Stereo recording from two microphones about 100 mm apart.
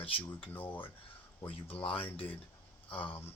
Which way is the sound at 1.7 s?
65° left (ahead or behind).